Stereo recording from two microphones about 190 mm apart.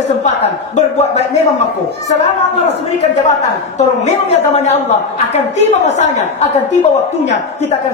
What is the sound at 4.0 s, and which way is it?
Speech, 35° left (ahead or behind).